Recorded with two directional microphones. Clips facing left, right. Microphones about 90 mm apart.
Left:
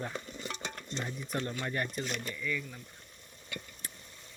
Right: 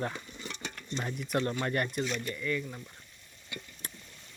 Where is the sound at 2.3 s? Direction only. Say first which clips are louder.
Right 3 dB; 45° right (ahead or behind).